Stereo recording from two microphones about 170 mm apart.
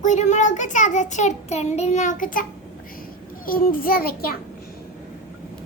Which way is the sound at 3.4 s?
55° left (ahead or behind).